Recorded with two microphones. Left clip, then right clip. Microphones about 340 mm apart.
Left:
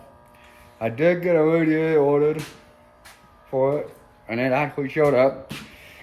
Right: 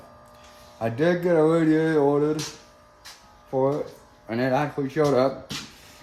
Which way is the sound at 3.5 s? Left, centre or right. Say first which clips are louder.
Left 2 dB; centre.